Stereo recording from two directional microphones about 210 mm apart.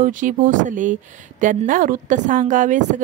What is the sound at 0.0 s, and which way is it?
Speech, 40° right (ahead or behind).